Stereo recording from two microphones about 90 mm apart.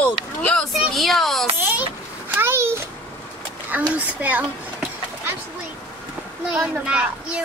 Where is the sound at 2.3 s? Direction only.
25° right (ahead or behind).